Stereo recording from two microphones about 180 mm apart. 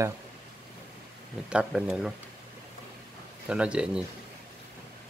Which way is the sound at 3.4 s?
5° right (ahead or behind).